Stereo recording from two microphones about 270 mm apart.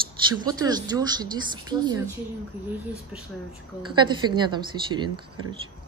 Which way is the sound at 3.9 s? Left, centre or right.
Centre.